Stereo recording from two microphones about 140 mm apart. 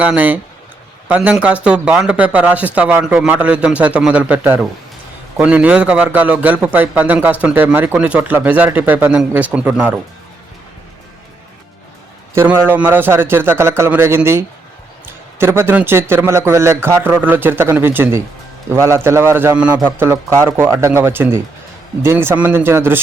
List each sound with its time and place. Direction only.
0.0 s a man's voice: 10° right (ahead or behind)
12.3 s a man's voice: 20° right (ahead or behind)